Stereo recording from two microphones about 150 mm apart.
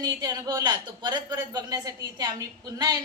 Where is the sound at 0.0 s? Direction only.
25° right (ahead or behind).